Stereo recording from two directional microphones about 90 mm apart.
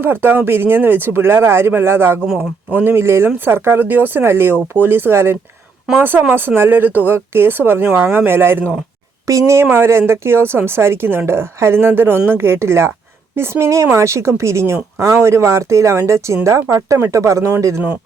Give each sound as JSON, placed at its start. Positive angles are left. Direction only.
{"t": 0.0, "sound": "speech", "side_deg": -25}
{"t": 9.2, "sound": "speech", "side_deg": -35}